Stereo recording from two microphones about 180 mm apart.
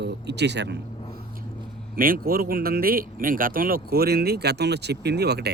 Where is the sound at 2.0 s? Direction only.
55° right (ahead or behind).